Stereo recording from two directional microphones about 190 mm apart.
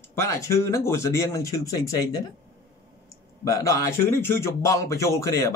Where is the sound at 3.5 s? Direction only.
15° left (ahead or behind).